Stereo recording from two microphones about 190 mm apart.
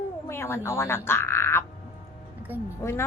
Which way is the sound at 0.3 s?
15° left (ahead or behind).